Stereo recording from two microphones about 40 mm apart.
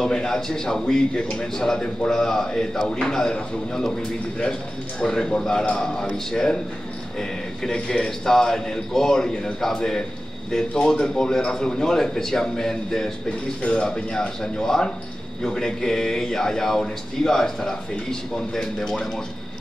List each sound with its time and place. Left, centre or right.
0.0 s a man's voice: centre
5.0 s a man's voice: centre
13.6 s a man's voice: left
14.4 s speech: centre